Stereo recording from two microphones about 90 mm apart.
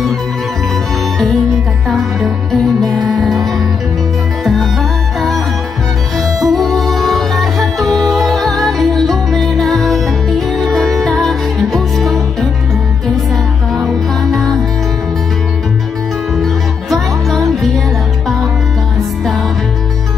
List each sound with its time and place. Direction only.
1.9 s music: 5° right (ahead or behind)
6.1 s music: centre (ahead or behind)
13.7 s music: centre (ahead or behind)